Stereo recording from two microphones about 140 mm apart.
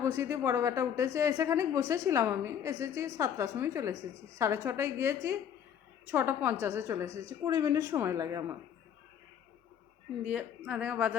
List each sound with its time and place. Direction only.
0.0 s a woman's voice: 20° right (ahead or behind)
3.9 s a woman's voice: 60° right (ahead or behind)
4.4 s a woman's voice: 20° right (ahead or behind)
10.2 s a woman's voice: 10° right (ahead or behind)